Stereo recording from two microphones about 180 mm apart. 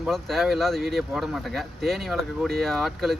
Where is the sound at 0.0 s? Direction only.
Centre (ahead or behind).